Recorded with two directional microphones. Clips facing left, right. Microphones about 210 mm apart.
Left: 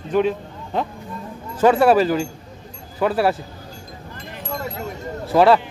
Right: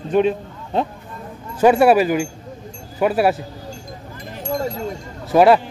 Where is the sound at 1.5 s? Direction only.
15° right (ahead or behind).